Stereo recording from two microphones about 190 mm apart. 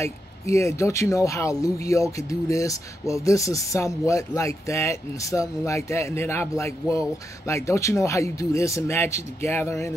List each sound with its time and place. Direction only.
0.0 s speech: 15° left (ahead or behind)